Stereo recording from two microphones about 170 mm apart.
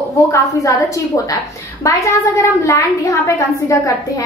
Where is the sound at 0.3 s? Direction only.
20° left (ahead or behind).